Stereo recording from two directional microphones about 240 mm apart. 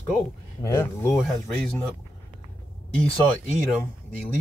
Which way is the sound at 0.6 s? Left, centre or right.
Centre.